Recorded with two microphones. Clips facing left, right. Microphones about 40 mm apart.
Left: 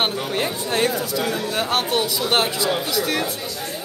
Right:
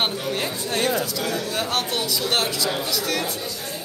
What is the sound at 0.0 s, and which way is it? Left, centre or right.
A man's voice, centre.